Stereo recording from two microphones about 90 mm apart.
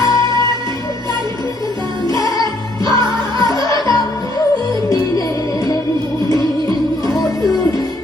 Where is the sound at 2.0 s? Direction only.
40° left (ahead or behind).